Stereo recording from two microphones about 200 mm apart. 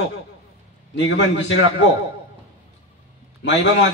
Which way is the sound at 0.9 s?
65° left (ahead or behind).